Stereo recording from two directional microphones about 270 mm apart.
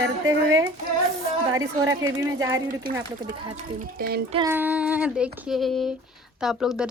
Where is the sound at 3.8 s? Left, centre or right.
Right.